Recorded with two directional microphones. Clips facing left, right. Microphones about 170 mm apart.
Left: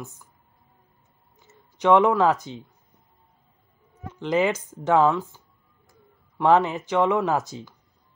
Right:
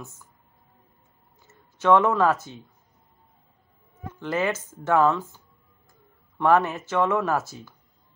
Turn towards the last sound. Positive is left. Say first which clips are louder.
# left 2 dB
turn(degrees=15)  # may be behind; listen again after turning